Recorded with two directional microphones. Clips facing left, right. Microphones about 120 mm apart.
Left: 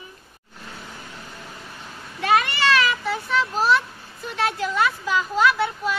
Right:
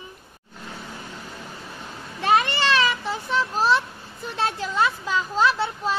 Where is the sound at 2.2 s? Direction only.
25° right (ahead or behind).